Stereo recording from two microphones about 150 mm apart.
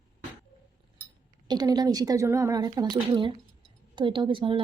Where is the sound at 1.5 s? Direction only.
25° right (ahead or behind).